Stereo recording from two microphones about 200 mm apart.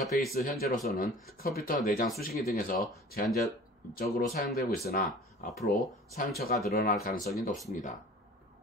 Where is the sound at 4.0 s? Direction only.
50° left (ahead or behind).